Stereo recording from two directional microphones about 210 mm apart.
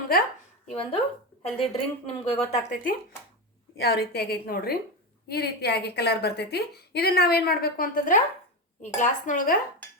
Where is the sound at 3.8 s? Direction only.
50° left (ahead or behind).